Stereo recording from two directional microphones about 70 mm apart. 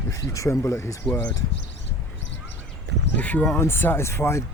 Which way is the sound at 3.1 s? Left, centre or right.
Left.